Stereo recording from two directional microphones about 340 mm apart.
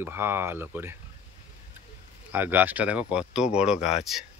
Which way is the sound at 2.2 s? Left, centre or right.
Centre.